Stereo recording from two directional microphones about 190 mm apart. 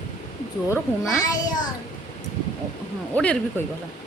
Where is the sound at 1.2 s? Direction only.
20° left (ahead or behind).